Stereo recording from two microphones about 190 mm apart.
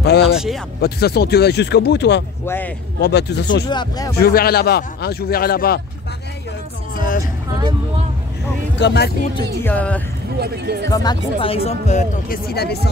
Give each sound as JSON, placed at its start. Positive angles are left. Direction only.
{"t": 0.0, "sound": "speech", "side_deg": 60}
{"t": 2.4, "sound": "speech", "side_deg": 10}
{"t": 3.0, "sound": "speech", "side_deg": 60}
{"t": 3.6, "sound": "speech", "side_deg": 20}
{"t": 4.2, "sound": "a man's voice", "side_deg": 55}
{"t": 7.0, "sound": "vehicle", "side_deg": 45}
{"t": 8.7, "sound": "speech", "side_deg": 65}
{"t": 9.6, "sound": "speech", "side_deg": 10}
{"t": 10.4, "sound": "speech", "side_deg": -55}
{"t": 10.9, "sound": "speech", "side_deg": 20}
{"t": 12.4, "sound": "speech", "side_deg": 55}